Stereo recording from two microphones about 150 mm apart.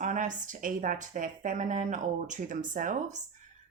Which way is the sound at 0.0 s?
55° right (ahead or behind).